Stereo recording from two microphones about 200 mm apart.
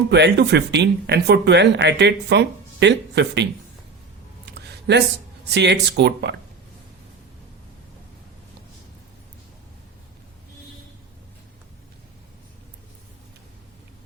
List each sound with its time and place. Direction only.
0.1 s speech: 60° right (ahead or behind)
4.5 s a sound: 55° right (ahead or behind)
5.5 s speech: 60° right (ahead or behind)